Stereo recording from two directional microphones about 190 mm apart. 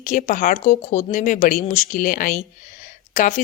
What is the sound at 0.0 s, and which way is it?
Speech, 40° left (ahead or behind).